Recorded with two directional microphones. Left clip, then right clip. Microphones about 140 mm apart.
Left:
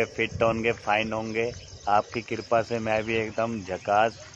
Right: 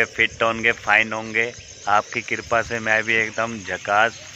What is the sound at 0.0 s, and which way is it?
Speech, centre (ahead or behind).